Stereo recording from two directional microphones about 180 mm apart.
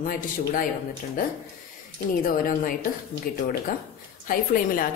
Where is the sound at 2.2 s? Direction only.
50° left (ahead or behind).